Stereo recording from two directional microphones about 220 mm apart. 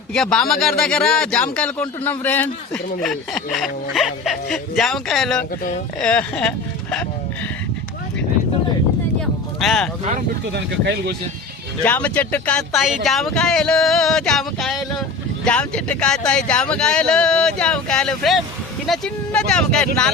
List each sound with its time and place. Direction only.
0.1 s speech: 5° left (ahead or behind)
9.6 s speech: centre (ahead or behind)
10.5 s speech: 50° right (ahead or behind)
11.9 s speech: 5° left (ahead or behind)